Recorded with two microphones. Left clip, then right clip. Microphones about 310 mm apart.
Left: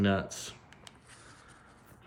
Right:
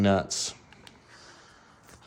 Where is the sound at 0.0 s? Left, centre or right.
Centre.